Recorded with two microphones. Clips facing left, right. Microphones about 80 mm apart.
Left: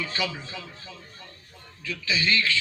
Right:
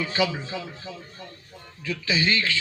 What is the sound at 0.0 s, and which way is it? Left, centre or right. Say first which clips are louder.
A man's voice: right 5 dB; centre.